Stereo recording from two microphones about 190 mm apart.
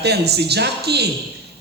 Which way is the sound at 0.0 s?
60° right (ahead or behind).